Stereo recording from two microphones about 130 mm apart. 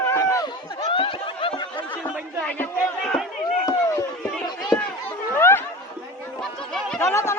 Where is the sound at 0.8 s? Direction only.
45° left (ahead or behind).